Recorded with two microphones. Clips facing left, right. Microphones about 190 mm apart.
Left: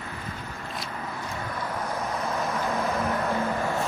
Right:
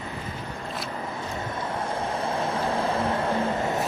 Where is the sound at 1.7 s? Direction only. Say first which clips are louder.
Right 2 dB; 25° right (ahead or behind).